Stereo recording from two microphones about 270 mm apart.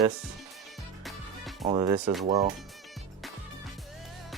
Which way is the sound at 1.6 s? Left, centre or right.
Centre.